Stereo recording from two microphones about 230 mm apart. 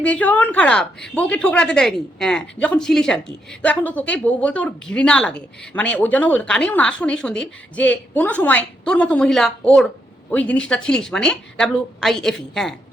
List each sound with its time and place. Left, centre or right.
0.0 s a woman's voice: centre